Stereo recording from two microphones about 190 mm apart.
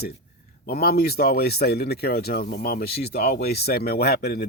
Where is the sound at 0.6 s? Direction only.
55° left (ahead or behind).